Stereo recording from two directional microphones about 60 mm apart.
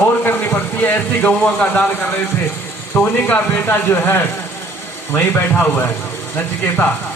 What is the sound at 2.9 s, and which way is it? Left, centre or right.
Speech, left.